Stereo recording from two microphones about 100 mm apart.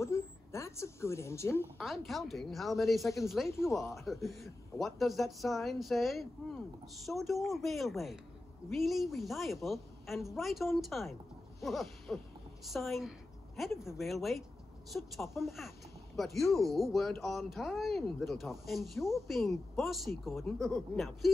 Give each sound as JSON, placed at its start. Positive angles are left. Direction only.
{"t": 0.0, "sound": "a sound", "side_deg": 30}
{"t": 1.8, "sound": "speech", "side_deg": 0}
{"t": 3.4, "sound": "speech", "side_deg": 25}
{"t": 3.9, "sound": "speech", "side_deg": 0}
{"t": 11.6, "sound": "owl", "side_deg": 0}
{"t": 12.6, "sound": "speech", "side_deg": 0}
{"t": 20.7, "sound": "speech", "side_deg": 10}